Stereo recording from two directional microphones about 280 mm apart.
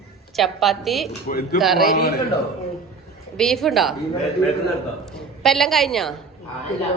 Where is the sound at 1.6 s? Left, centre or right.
Centre.